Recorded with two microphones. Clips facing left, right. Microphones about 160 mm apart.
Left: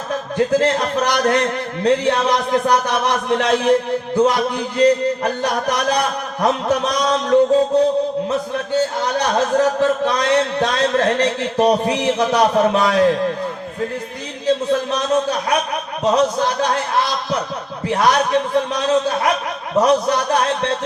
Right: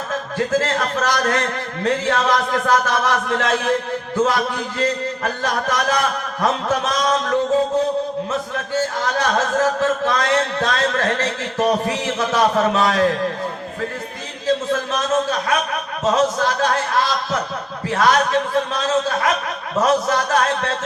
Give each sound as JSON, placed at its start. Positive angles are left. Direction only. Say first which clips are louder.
{"t": 0.3, "sound": "a man's voice", "louder": "left 4 dB", "side_deg": 20}
{"t": 8.7, "sound": "a man's voice", "louder": "left 2 dB", "side_deg": 20}
{"t": 14.4, "sound": "music", "louder": "left 2 dB", "side_deg": 20}
{"t": 16.0, "sound": "speech", "louder": "left 1 dB", "side_deg": 15}
{"t": 17.8, "sound": "a man's voice", "louder": "left 1 dB", "side_deg": 20}